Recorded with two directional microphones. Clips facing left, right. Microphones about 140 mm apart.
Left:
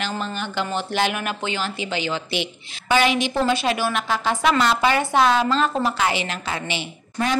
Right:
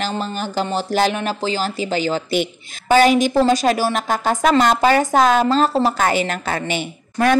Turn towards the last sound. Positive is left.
turn(degrees=-50)  # may be behind; listen again after turning